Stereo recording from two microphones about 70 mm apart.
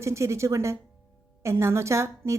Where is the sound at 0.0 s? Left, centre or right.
Right.